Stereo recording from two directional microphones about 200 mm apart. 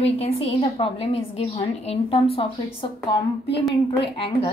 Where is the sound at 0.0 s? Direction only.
30° left (ahead or behind).